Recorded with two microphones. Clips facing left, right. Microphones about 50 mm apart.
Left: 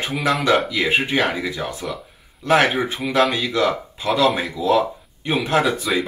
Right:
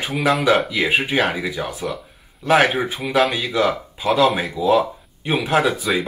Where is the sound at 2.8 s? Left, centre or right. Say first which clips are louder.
Even; centre.